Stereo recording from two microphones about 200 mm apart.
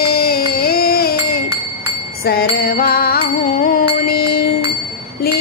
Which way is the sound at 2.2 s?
50° left (ahead or behind).